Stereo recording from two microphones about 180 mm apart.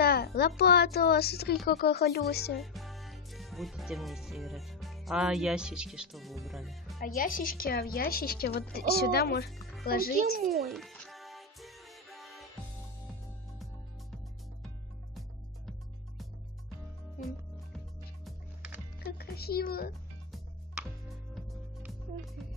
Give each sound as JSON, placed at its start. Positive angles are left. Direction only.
{"t": 0.0, "sound": "a woman's voice", "side_deg": 60}
{"t": 2.5, "sound": "speech", "side_deg": 0}
{"t": 7.2, "sound": "a woman's voice", "side_deg": 50}
{"t": 10.6, "sound": "music", "side_deg": 0}
{"t": 18.2, "sound": "music", "side_deg": -10}
{"t": 18.9, "sound": "music", "side_deg": 60}
{"t": 21.4, "sound": "music", "side_deg": 0}